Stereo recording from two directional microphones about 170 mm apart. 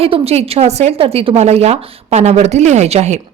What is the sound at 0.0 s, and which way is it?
A woman's voice, 35° right (ahead or behind).